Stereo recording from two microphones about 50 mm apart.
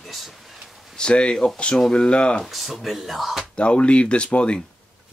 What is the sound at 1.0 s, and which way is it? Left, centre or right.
Speech, centre.